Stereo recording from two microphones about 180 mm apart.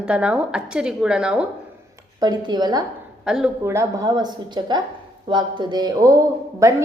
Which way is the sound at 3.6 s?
15° right (ahead or behind).